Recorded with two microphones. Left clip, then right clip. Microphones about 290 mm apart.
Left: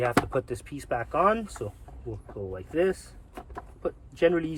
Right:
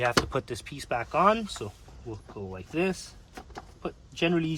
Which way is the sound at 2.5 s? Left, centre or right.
Centre.